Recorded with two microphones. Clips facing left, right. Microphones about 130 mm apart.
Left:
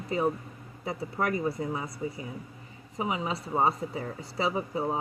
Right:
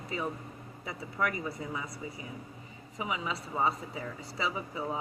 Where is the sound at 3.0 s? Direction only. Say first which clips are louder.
Left 4 dB; 40° left (ahead or behind).